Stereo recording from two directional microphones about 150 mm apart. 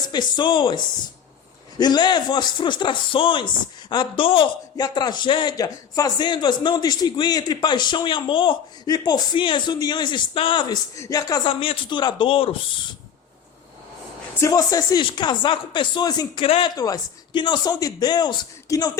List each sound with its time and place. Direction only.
0.1 s a man's voice: 30° left (ahead or behind)
1.8 s a man's voice: 30° left (ahead or behind)
10.9 s a man's voice: 20° left (ahead or behind)
14.4 s a man's voice: 20° left (ahead or behind)